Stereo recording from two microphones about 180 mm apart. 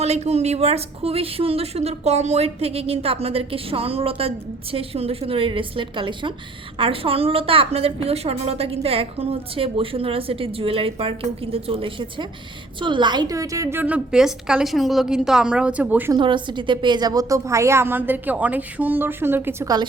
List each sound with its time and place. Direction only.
0.0 s a woman's voice: 35° right (ahead or behind); by 16.1 s 10° right (ahead or behind)
16.1 s a woman's voice: 25° right (ahead or behind)